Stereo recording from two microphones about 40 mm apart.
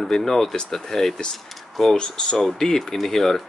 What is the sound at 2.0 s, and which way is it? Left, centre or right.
Speech, centre.